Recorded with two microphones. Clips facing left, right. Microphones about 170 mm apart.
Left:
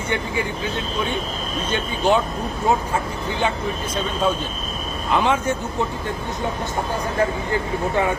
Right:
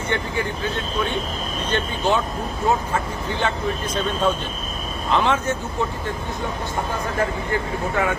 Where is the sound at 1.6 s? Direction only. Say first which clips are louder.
Left 2 dB; 10° left (ahead or behind).